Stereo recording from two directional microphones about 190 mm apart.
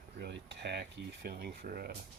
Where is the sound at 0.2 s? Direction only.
60° right (ahead or behind).